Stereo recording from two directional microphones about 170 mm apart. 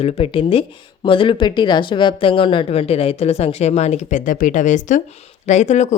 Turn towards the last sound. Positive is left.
turn(degrees=40)  # may be behind; listen again after turning